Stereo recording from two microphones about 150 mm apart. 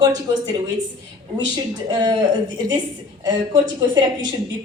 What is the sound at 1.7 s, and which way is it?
Speech, 25° right (ahead or behind).